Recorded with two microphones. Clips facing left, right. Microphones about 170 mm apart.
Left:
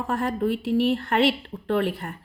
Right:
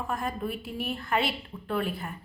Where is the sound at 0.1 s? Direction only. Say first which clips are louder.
Left 9 dB; 75° left (ahead or behind).